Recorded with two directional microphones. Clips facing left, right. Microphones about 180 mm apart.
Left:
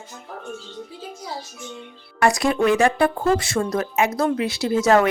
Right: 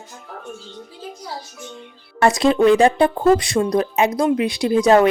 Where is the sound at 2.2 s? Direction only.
20° right (ahead or behind).